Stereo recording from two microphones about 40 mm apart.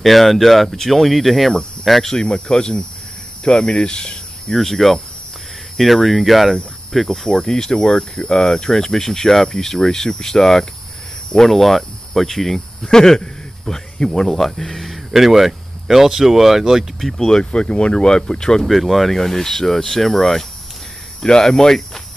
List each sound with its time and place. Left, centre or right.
0.0 s speech: centre
2.1 s speech: left
4.6 s speech: centre
7.1 s speech: centre
17.0 s speech: centre
18.6 s speech: centre